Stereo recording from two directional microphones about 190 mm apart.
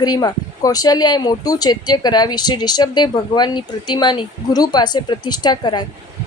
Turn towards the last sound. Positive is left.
turn(degrees=20)  # may be behind; listen again after turning